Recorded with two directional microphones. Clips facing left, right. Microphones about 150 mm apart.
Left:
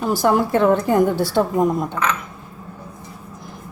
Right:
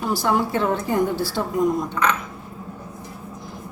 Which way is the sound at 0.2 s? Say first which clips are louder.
Left 7 dB; 50° left (ahead or behind).